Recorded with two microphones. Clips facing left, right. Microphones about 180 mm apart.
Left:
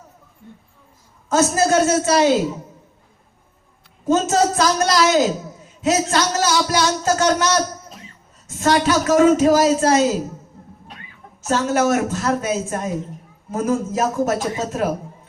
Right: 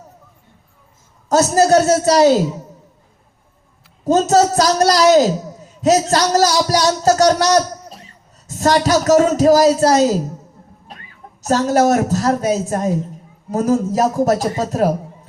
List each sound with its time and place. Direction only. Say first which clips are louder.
1.3 s speech: right 4 dB; 40° right (ahead or behind)
4.0 s speech: right 4 dB; 40° right (ahead or behind)
11.4 s speech: right 4 dB; 35° right (ahead or behind)